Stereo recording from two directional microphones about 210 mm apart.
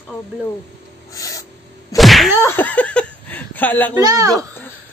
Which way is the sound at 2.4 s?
10° left (ahead or behind).